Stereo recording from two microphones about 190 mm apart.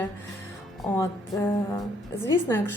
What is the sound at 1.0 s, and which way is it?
Speech, 15° left (ahead or behind).